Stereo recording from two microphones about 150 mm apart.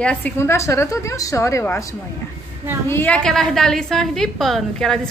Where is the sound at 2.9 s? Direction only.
10° left (ahead or behind).